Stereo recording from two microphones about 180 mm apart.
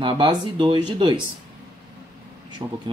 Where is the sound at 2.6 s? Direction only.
20° right (ahead or behind).